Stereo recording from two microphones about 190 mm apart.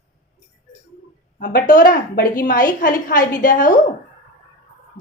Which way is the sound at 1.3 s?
45° left (ahead or behind).